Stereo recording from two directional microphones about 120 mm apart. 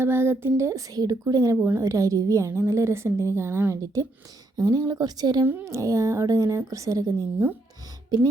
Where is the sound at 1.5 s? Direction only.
15° right (ahead or behind).